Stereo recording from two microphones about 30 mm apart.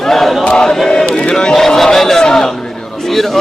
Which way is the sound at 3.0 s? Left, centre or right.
Centre.